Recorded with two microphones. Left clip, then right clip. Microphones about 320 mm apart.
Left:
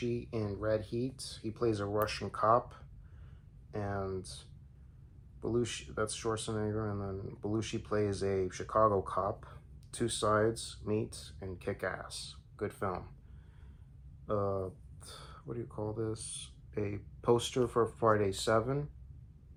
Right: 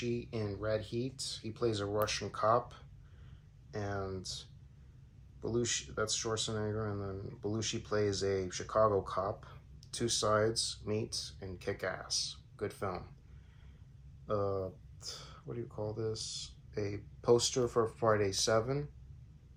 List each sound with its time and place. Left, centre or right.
0.1 s speech: centre
14.3 s speech: centre
16.0 s speech: centre